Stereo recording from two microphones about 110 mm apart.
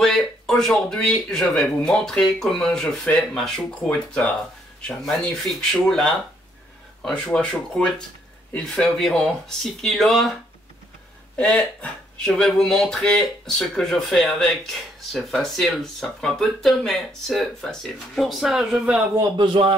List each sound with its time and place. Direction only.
0.0 s speech: 5° left (ahead or behind)
11.3 s speech: 10° left (ahead or behind); by 19.0 s 10° right (ahead or behind)
19.3 s a man's voice: 45° right (ahead or behind)